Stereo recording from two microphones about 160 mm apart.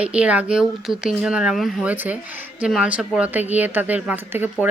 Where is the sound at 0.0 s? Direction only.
5° right (ahead or behind).